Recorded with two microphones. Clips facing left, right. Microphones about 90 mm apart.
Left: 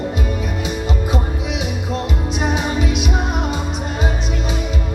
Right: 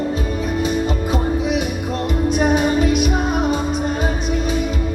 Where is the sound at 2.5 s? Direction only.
45° right (ahead or behind).